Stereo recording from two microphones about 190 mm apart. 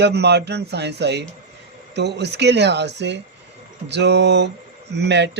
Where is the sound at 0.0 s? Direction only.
60° right (ahead or behind).